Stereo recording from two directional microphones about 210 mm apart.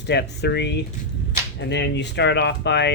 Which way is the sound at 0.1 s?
55° left (ahead or behind).